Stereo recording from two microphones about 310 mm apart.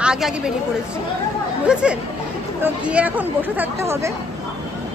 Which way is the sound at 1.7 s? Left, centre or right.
Centre.